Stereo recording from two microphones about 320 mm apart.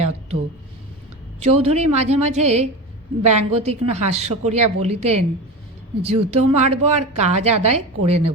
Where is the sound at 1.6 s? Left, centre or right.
Centre.